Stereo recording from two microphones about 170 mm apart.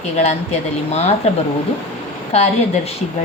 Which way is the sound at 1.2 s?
40° left (ahead or behind).